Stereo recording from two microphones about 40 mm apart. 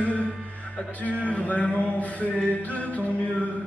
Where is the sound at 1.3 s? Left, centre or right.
Left.